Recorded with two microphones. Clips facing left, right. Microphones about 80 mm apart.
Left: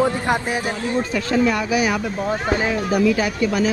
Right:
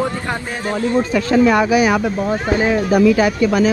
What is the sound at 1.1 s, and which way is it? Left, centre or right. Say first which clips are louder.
Speech: right 6 dB; right.